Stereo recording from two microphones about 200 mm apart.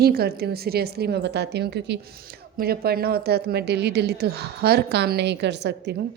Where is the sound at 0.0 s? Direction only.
50° right (ahead or behind).